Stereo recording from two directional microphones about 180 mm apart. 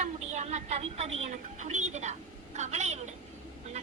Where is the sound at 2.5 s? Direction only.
40° right (ahead or behind).